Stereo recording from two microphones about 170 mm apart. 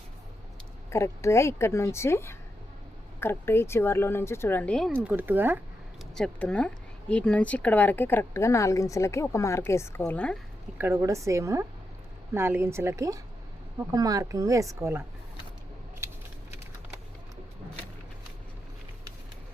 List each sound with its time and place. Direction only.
0.9 s speech: 15° left (ahead or behind)
5.0 s a woman's voice: 10° right (ahead or behind)
6.1 s speech: 5° left (ahead or behind)
10.8 s a woman's voice: 15° right (ahead or behind)